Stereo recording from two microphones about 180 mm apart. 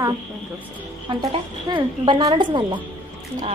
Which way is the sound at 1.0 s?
25° right (ahead or behind).